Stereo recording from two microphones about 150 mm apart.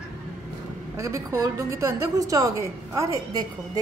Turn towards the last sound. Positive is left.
turn(degrees=-25)  # may be behind; listen again after turning